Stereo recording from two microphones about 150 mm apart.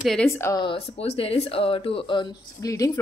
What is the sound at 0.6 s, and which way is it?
Speech, 40° left (ahead or behind).